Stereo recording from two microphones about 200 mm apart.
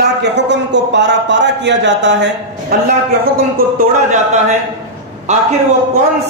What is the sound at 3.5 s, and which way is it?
Speech, 40° right (ahead or behind).